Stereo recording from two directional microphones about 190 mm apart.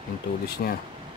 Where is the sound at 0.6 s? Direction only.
50° left (ahead or behind).